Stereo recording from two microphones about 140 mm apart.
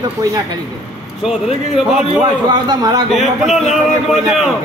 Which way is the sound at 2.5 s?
30° right (ahead or behind).